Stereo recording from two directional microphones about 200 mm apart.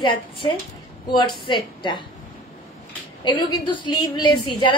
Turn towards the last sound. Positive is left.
turn(degrees=20)  # may be behind; listen again after turning